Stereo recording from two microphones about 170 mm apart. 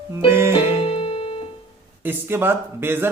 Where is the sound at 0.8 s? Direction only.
30° left (ahead or behind).